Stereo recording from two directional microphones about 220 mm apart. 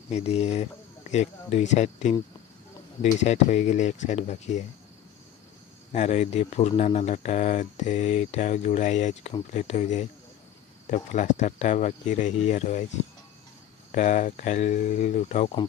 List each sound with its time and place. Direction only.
0.1 s speech: 30° left (ahead or behind)
3.2 s speech: 30° left (ahead or behind)
5.9 s speech: 30° left (ahead or behind)